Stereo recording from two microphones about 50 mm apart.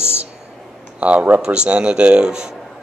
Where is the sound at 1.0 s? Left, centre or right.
Right.